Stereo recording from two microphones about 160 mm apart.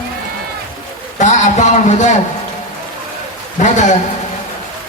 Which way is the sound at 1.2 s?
50° left (ahead or behind).